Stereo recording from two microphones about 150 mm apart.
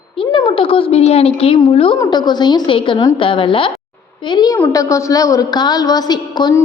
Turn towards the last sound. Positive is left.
turn(degrees=30)  # may be behind; listen again after turning